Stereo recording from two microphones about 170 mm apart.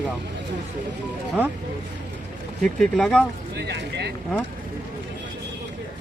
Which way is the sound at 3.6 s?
80° right.